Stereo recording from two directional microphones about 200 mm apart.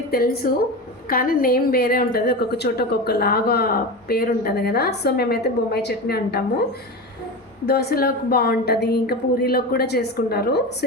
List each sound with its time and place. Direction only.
0.1 s a woman's voice: 50° left (ahead or behind)
7.7 s a woman's voice: 50° left (ahead or behind)